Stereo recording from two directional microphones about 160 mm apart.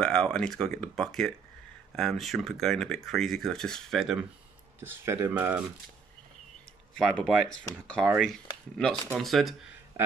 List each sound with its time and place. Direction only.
0.0 s speech: 5° left (ahead or behind)
4.7 s speech: 15° right (ahead or behind)
7.0 s speech: centre (ahead or behind)
9.9 s a sound: 20° right (ahead or behind)